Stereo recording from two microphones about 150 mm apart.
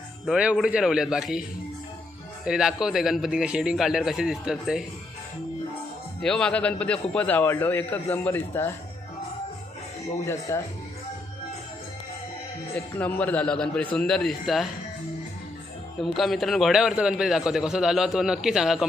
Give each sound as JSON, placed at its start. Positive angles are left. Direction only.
{"t": 0.3, "sound": "a man's voice", "side_deg": -5}
{"t": 6.2, "sound": "a man's voice", "side_deg": 5}
{"t": 10.5, "sound": "speech", "side_deg": 20}
{"t": 12.7, "sound": "a man's voice", "side_deg": 10}
{"t": 16.0, "sound": "a man's voice", "side_deg": 0}